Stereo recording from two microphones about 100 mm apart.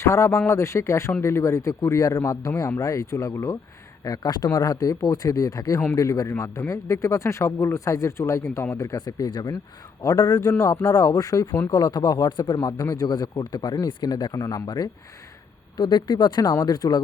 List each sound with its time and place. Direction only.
0.0 s speech: 30° left (ahead or behind)